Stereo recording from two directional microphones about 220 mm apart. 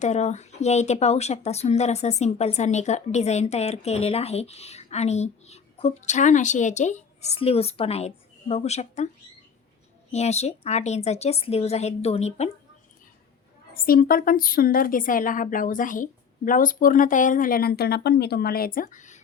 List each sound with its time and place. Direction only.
0.0 s speech: 30° left (ahead or behind)
10.1 s speech: 30° left (ahead or behind)
13.7 s a woman's voice: 40° left (ahead or behind)